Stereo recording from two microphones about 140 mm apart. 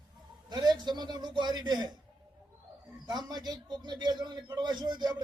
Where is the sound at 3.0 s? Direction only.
30° right (ahead or behind).